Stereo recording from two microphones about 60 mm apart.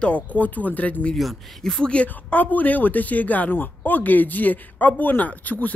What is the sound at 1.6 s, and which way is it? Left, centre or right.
Speech, centre.